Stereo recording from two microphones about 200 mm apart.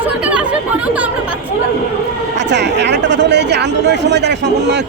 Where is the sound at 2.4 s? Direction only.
60° right (ahead or behind).